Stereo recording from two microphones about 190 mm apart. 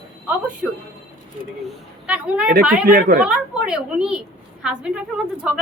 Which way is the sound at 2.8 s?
45° right (ahead or behind).